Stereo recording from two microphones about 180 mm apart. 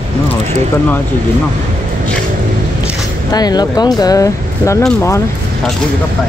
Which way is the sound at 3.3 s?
20° left (ahead or behind).